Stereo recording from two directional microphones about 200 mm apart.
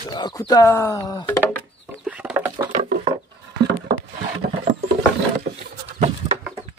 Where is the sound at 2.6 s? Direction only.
25° right (ahead or behind).